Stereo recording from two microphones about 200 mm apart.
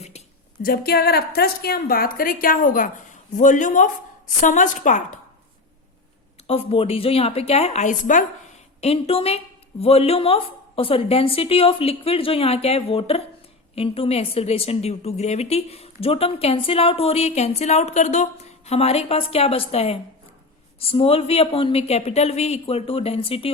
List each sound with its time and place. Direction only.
0.6 s a woman's voice: 45° left (ahead or behind)
6.5 s a woman's voice: 30° left (ahead or behind)